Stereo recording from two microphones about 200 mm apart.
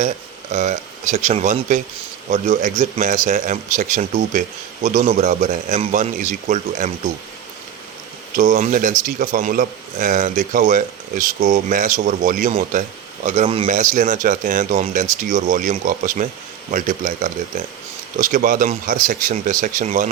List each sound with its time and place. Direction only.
0.5 s speech: 35° right (ahead or behind)
8.4 s speech: 40° right (ahead or behind)